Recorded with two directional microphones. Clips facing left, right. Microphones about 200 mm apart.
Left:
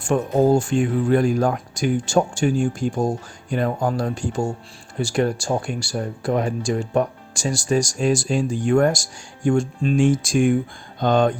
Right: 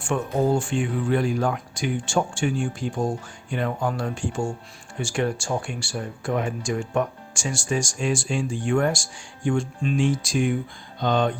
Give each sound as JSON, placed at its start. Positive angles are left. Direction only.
{"t": 0.0, "sound": "speech", "side_deg": 40}